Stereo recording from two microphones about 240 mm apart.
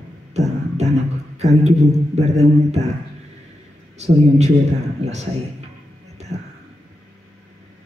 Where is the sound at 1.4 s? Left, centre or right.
Right.